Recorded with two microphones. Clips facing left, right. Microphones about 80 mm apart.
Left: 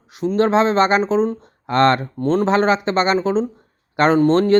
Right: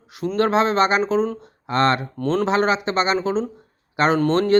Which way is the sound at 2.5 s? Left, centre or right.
Left.